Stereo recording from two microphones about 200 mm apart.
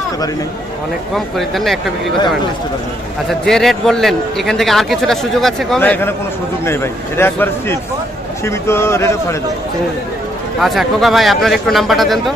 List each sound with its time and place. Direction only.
1.1 s a man's voice: centre (ahead or behind)
3.3 s a man's voice: centre (ahead or behind)
10.6 s a man's voice: centre (ahead or behind)